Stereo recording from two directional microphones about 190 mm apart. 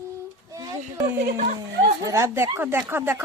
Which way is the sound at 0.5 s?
20° right (ahead or behind).